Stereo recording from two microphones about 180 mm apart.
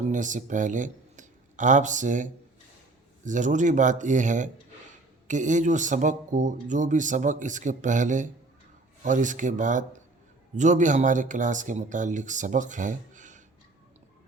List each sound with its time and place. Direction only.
0.1 s a man's voice: 45° right (ahead or behind)